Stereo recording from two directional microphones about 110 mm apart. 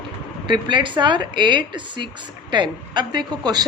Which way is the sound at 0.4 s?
45° right (ahead or behind).